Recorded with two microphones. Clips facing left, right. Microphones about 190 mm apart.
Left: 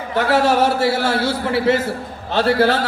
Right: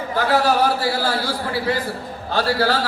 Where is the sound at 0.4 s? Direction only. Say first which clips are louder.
Left 3 dB; 25° left (ahead or behind).